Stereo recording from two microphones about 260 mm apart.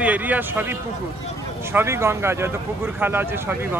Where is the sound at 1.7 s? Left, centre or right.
Centre.